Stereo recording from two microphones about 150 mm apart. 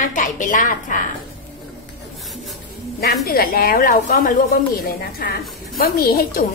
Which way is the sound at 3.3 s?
85° left.